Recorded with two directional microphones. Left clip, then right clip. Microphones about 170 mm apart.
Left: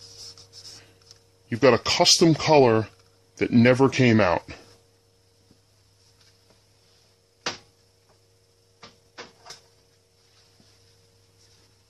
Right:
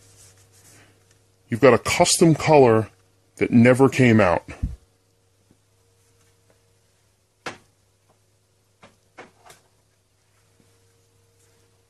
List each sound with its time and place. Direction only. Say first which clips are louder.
1.5 s speech: right 3 dB; 40° right (ahead or behind)